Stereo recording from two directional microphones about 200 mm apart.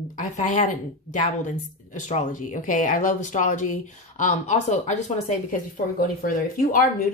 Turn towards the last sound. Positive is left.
turn(degrees=45)  # may be behind; listen again after turning